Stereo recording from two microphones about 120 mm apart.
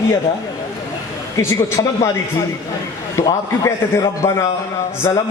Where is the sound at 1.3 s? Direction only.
25° left (ahead or behind).